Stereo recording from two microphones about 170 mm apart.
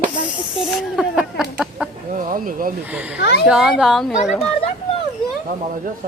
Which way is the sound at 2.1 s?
55° right (ahead or behind).